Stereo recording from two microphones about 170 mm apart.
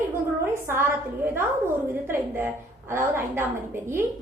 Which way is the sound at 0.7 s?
15° right (ahead or behind).